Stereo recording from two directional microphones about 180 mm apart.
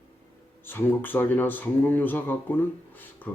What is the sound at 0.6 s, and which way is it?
Speech, 10° left (ahead or behind).